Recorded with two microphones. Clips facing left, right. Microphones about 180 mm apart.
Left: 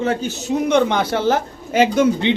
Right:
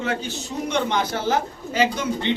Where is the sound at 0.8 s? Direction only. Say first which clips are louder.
Left 2 dB; 55° left (ahead or behind).